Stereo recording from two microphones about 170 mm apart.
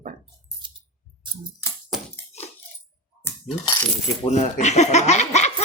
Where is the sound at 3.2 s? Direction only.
15° left (ahead or behind).